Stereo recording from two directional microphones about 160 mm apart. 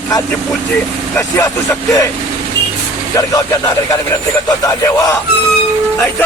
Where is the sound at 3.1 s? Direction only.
20° left (ahead or behind).